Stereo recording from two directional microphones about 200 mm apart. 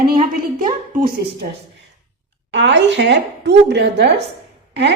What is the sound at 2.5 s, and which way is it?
A woman's voice, 60° right (ahead or behind).